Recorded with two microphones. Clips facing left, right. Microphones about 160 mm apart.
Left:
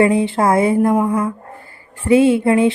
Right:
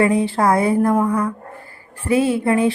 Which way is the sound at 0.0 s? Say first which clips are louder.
Left 2 dB; 25° left (ahead or behind).